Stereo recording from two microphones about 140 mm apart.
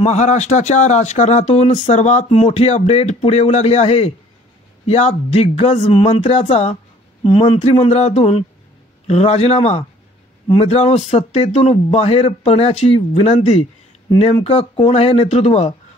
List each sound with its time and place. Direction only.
0.0 s speech: 55° left (ahead or behind)
7.2 s speech: 35° left (ahead or behind)
7.5 s speech: 50° left (ahead or behind)